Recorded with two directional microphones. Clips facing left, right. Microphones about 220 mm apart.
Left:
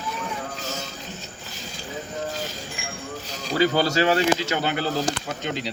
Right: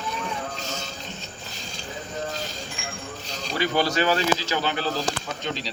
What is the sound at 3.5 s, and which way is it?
Speech, 30° left (ahead or behind).